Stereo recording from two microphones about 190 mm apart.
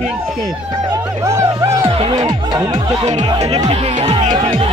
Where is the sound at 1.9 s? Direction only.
30° right (ahead or behind).